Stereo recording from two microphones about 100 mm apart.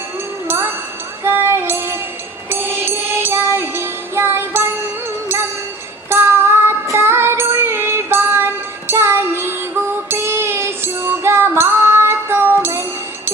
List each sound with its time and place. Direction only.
0.4 s a sound: 25° right (ahead or behind)
1.2 s music: 25° right (ahead or behind)
6.1 s music: 25° right (ahead or behind)